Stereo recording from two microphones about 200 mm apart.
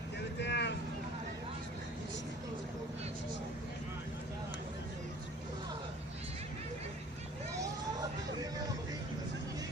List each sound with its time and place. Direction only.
0.3 s vehicle: 60° left (ahead or behind)